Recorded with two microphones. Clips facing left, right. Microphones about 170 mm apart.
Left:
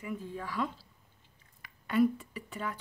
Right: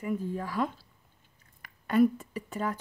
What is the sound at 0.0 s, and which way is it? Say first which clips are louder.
Speech: right 6 dB; 45° right (ahead or behind).